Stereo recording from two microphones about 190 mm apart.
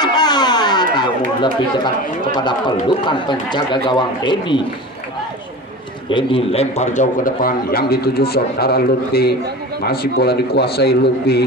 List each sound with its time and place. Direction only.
0.0 s a sound: 20° left (ahead or behind)
0.9 s speech: 25° left (ahead or behind)
6.0 s a man's voice: 25° left (ahead or behind); by 11.4 s 60° left (ahead or behind)